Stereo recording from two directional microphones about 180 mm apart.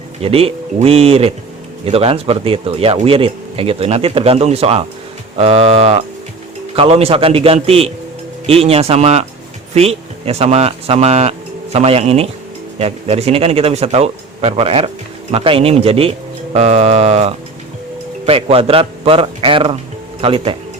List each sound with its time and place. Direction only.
0.2 s speech: 35° right (ahead or behind)